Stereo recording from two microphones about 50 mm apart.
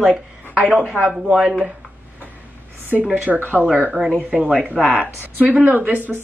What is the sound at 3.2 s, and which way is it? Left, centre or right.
Speech, right.